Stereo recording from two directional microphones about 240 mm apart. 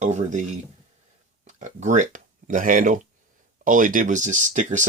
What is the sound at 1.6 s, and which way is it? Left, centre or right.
Speech, right.